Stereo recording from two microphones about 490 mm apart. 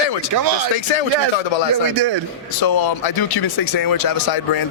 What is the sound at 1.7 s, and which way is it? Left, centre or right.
Speech, right.